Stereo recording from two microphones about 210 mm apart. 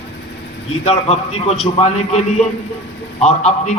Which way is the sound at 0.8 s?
30° left (ahead or behind).